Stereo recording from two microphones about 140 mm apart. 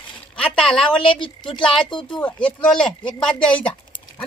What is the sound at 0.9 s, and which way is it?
A child's voice, 40° left (ahead or behind).